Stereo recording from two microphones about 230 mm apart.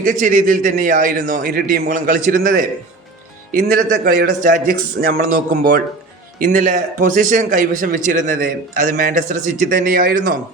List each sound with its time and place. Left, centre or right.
0.0 s speech: right